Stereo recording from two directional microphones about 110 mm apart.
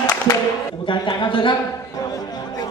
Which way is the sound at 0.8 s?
50° left (ahead or behind).